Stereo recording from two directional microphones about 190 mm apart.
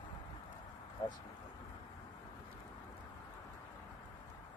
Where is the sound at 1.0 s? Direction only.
25° left (ahead or behind).